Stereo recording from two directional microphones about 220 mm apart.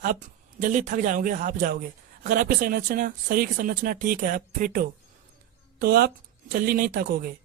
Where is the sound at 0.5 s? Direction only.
35° right (ahead or behind).